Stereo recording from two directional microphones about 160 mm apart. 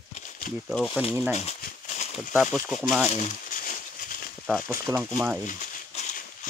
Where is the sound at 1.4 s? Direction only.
45° left (ahead or behind).